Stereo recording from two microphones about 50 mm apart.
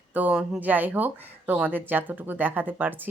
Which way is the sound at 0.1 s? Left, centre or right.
Right.